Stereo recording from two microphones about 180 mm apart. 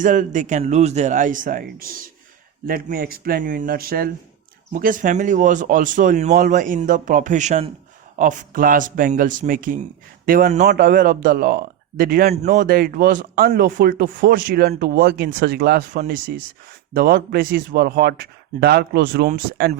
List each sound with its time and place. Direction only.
0.0 s speech: 45° right (ahead or behind)
10.7 s speech: 55° right (ahead or behind)
12.3 s speech: 40° right (ahead or behind); by 19.3 s 60° right (ahead or behind)